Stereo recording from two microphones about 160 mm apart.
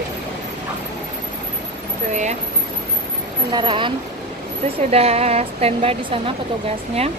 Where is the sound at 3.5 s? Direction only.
30° right (ahead or behind).